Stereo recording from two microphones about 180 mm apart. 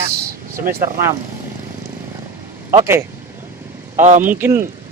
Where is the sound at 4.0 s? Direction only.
45° right (ahead or behind).